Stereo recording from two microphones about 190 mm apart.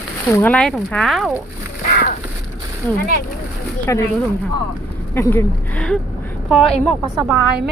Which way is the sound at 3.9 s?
15° left (ahead or behind).